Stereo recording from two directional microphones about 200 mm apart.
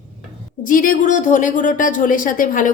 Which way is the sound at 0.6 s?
40° left (ahead or behind).